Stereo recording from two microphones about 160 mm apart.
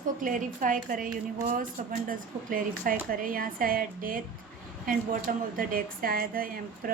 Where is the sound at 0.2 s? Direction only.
55° right (ahead or behind).